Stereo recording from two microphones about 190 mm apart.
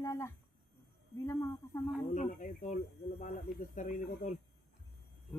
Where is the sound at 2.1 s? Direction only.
40° left (ahead or behind).